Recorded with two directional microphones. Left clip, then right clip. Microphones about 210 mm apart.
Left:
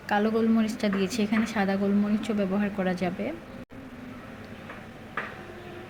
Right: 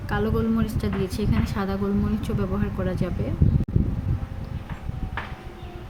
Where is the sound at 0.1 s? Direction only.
10° left (ahead or behind).